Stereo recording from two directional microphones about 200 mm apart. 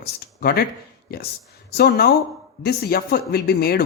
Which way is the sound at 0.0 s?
50° left (ahead or behind).